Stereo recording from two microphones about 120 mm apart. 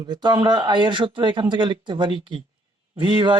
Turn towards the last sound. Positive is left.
turn(degrees=-40)  # may be behind; listen again after turning